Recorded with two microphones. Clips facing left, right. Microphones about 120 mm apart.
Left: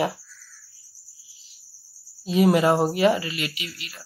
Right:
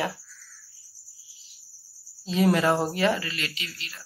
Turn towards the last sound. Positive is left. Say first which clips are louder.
# left 3 dB
turn(degrees=10)  # may be behind; listen again after turning